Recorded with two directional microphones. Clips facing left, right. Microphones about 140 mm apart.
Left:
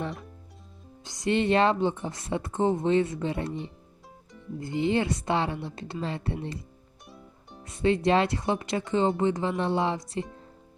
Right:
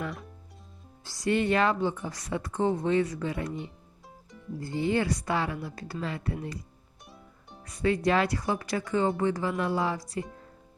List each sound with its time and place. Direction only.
1.0 s speech: 20° left (ahead or behind)
4.6 s speech: 20° left (ahead or behind)
7.6 s speech: 25° left (ahead or behind)